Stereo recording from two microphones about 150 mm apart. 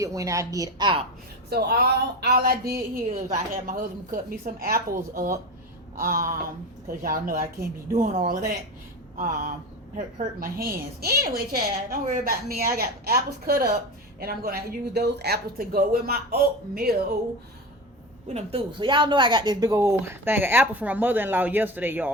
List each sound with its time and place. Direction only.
0.0 s a woman's voice: 20° right (ahead or behind)
1.5 s speech: 90° right
2.9 s a woman's voice: 65° right (ahead or behind)
10.2 s a woman's voice: 75° right (ahead or behind); by 16.9 s 90° right
18.3 s speech: 35° right (ahead or behind); by 22.1 s 10° right (ahead or behind)